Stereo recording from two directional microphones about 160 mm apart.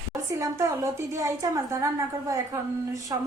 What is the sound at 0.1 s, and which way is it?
A woman's voice, 20° right (ahead or behind).